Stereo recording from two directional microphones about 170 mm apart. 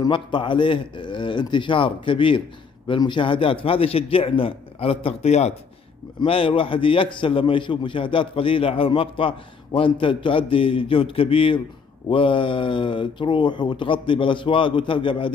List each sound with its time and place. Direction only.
0.0 s a man's voice: 30° left (ahead or behind)